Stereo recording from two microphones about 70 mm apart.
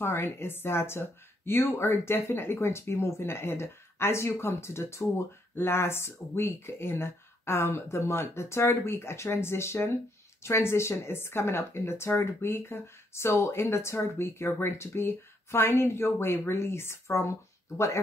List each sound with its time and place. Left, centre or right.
0.0 s speech: left